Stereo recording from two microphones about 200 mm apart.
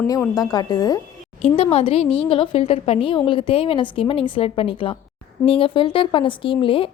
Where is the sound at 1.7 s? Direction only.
30° left (ahead or behind).